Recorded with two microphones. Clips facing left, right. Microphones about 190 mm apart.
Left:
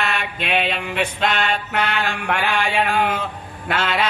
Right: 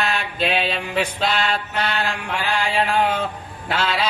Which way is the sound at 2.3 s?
60° left (ahead or behind).